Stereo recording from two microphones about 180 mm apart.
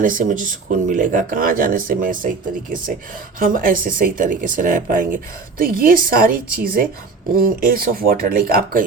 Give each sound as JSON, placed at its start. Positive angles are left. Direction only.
{"t": 0.0, "sound": "speech", "side_deg": -50}